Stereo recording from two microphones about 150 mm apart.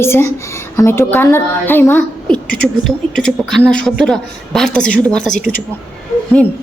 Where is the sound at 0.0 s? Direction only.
15° left (ahead or behind).